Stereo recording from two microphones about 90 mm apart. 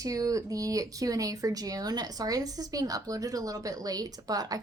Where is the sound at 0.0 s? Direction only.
40° right (ahead or behind).